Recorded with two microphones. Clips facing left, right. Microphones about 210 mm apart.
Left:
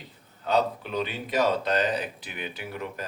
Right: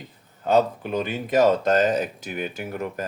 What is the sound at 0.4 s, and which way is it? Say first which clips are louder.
Speech: right 5 dB; 45° right (ahead or behind).